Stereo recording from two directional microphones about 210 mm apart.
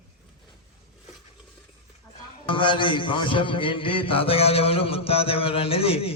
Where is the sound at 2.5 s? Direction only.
25° left (ahead or behind).